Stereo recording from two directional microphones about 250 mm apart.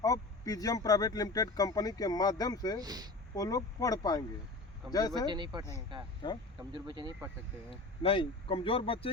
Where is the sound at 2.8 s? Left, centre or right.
Centre.